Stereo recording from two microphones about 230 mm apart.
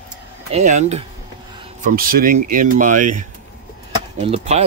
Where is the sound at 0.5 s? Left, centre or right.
Right.